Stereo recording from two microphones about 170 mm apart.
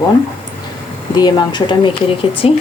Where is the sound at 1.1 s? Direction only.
25° left (ahead or behind).